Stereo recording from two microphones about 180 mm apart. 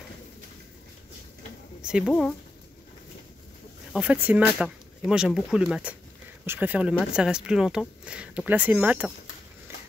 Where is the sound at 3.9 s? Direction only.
10° right (ahead or behind).